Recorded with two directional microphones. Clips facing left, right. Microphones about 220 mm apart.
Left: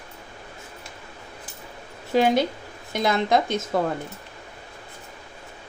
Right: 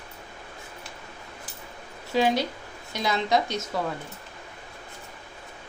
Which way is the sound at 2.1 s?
50° left (ahead or behind).